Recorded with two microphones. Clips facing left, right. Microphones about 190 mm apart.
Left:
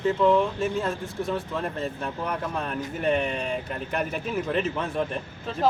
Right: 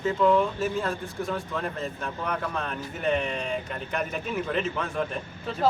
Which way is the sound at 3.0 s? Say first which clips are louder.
Left 1 dB; centre (ahead or behind).